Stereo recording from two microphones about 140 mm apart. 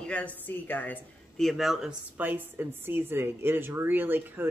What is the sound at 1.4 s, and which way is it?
A woman's voice, centre (ahead or behind).